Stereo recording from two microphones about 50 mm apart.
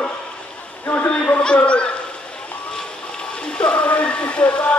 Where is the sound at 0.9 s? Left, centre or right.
Left.